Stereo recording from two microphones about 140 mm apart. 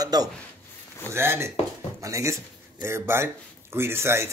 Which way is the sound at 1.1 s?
20° right (ahead or behind).